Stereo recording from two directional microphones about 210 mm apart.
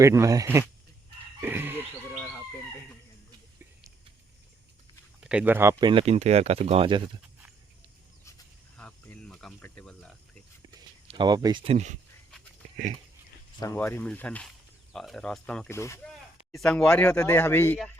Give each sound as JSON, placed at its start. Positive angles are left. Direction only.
{"t": 0.0, "sound": "speech", "side_deg": -15}
{"t": 1.4, "sound": "chicken", "side_deg": -10}
{"t": 2.0, "sound": "bird", "side_deg": 10}
{"t": 3.6, "sound": "a sound", "side_deg": -10}
{"t": 5.2, "sound": "speech", "side_deg": -5}
{"t": 5.8, "sound": "speech", "side_deg": -25}
{"t": 8.8, "sound": "cricket", "side_deg": 5}
{"t": 10.8, "sound": "speech", "side_deg": -20}
{"t": 13.6, "sound": "speech", "side_deg": 10}